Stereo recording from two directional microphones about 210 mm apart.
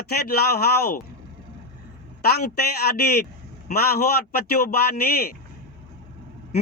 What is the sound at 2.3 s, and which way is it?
A man's voice, 50° left (ahead or behind).